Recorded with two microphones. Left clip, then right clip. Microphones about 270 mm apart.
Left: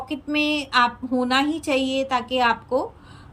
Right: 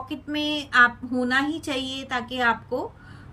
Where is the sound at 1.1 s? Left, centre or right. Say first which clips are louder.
Left 6 dB; left.